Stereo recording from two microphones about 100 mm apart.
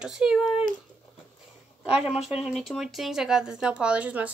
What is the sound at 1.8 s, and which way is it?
Speech, 5° right (ahead or behind).